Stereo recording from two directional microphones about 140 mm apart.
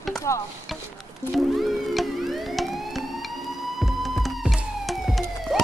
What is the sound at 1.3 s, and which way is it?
Emergency vehicle, centre (ahead or behind).